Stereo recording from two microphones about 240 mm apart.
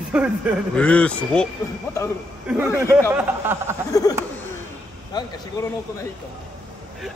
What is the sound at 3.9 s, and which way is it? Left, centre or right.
A man's voice, centre.